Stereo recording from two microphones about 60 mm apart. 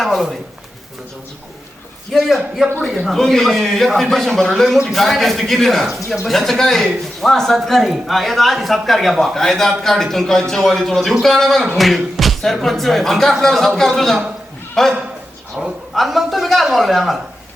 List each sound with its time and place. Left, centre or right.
0.0 s speech: centre
2.1 s speech: centre
15.6 s a woman's voice: centre
16.0 s speech: centre